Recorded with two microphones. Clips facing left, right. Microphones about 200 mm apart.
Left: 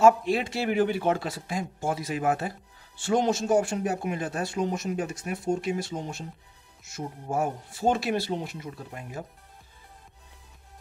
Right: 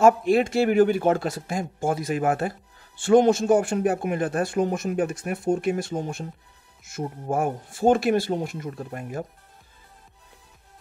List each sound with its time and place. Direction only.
0.0 s speech: 50° right (ahead or behind)